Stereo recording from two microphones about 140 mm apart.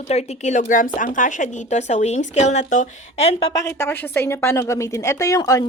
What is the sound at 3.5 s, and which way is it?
A woman's voice, 20° left (ahead or behind).